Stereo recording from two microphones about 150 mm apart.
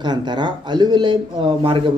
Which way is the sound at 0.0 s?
30° right (ahead or behind).